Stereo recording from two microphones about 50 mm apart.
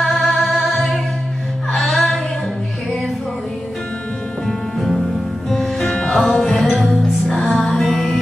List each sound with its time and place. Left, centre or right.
0.0 s music: centre
4.5 s music: centre